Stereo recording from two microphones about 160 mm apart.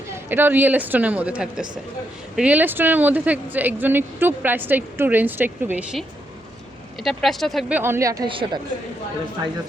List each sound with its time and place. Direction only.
0.1 s speech: 15° right (ahead or behind)
7.0 s speech: centre (ahead or behind)
7.7 s speech: 15° right (ahead or behind)
8.3 s speech: 35° right (ahead or behind)